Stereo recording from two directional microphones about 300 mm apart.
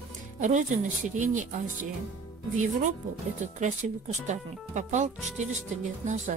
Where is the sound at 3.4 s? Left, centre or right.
Right.